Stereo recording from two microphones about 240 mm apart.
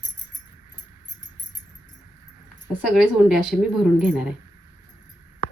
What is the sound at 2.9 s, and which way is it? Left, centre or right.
A woman's voice, centre.